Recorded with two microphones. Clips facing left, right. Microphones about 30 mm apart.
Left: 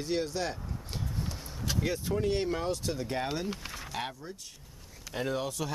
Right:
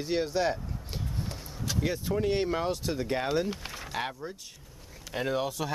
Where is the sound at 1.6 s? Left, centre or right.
Centre.